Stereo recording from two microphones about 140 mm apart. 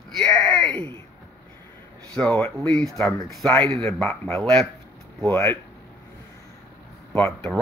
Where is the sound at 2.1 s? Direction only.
10° left (ahead or behind).